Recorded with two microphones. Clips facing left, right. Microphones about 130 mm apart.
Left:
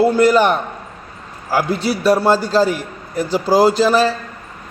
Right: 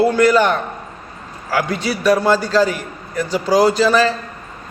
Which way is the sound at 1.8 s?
35° left (ahead or behind).